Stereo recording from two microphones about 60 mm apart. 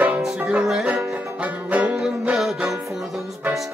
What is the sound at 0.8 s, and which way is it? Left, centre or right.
Music, right.